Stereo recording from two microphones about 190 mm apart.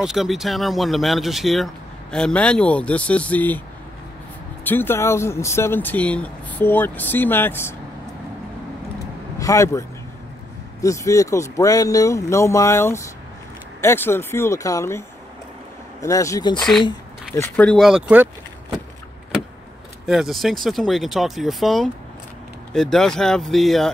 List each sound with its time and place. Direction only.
0.0 s speech: centre (ahead or behind)
4.6 s speech: 10° left (ahead or behind)
9.4 s speech: 15° left (ahead or behind)
16.5 s speech: 5° left (ahead or behind)
20.1 s speech: centre (ahead or behind)